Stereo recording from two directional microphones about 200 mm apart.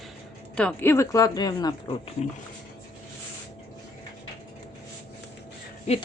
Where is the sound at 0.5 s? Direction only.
10° left (ahead or behind).